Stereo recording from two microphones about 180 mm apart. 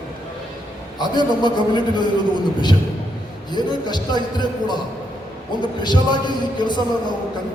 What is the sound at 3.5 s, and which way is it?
A man's voice, 25° left (ahead or behind).